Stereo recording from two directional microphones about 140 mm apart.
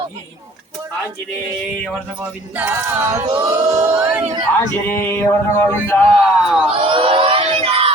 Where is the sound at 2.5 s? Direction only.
15° right (ahead or behind).